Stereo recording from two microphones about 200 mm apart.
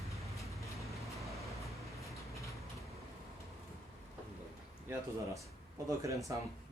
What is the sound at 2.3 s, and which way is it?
Train, 15° left (ahead or behind).